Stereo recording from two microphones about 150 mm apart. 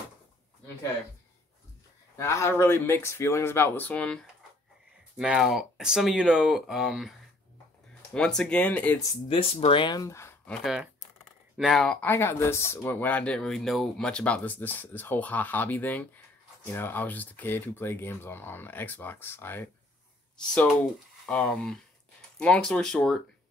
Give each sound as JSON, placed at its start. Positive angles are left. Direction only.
{"t": 2.1, "sound": "speech", "side_deg": 20}
{"t": 5.1, "sound": "speech", "side_deg": -5}
{"t": 9.3, "sound": "speech", "side_deg": 40}
{"t": 10.5, "sound": "speech", "side_deg": 0}
{"t": 21.3, "sound": "speech", "side_deg": 5}